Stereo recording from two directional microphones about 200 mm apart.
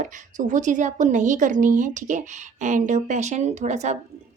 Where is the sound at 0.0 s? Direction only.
40° right (ahead or behind).